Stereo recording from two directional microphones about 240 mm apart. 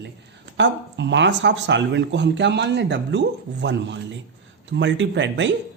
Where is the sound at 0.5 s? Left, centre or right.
Right.